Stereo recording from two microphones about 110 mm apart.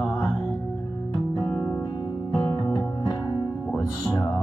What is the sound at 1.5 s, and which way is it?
Music, 20° left (ahead or behind).